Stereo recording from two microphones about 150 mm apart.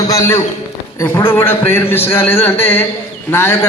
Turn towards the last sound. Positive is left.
turn(degrees=15)  # may be behind; listen again after turning